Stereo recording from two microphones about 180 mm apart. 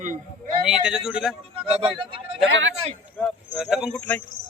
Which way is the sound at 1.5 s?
30° right (ahead or behind).